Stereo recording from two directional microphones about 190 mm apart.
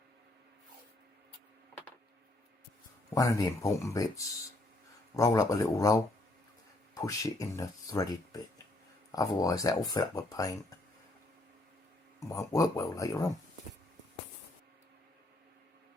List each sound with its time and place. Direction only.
3.2 s speech: 15° left (ahead or behind)
12.3 s speech: 15° left (ahead or behind)